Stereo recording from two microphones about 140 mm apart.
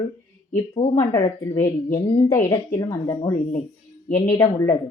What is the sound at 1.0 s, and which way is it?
A woman's voice, 25° left (ahead or behind).